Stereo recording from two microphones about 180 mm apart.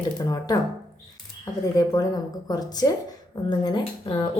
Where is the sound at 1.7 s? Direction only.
20° left (ahead or behind).